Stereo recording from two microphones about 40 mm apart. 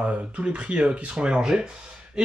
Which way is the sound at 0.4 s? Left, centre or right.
Right.